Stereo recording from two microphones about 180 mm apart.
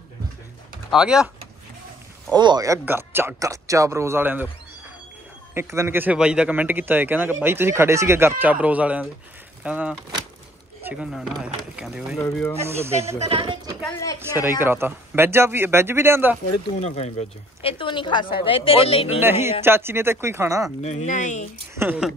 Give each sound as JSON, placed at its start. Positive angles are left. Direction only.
{"t": 0.8, "sound": "speech", "side_deg": -5}
{"t": 2.3, "sound": "speech", "side_deg": -20}
{"t": 5.5, "sound": "speech", "side_deg": -15}
{"t": 10.8, "sound": "a sound", "side_deg": -10}
{"t": 11.1, "sound": "speech", "side_deg": 0}
{"t": 12.2, "sound": "speech", "side_deg": 10}
{"t": 12.6, "sound": "speech", "side_deg": -15}
{"t": 13.2, "sound": "a woman's voice", "side_deg": -30}
{"t": 14.3, "sound": "speech", "side_deg": -15}
{"t": 16.8, "sound": "speech", "side_deg": 40}
{"t": 19.6, "sound": "speech", "side_deg": -15}
{"t": 20.8, "sound": "speech", "side_deg": 40}
{"t": 21.7, "sound": "speech", "side_deg": -10}